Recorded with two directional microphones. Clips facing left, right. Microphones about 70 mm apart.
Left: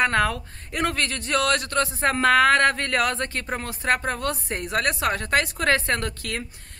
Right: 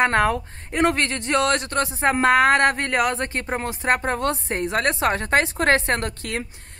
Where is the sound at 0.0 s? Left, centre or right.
Right.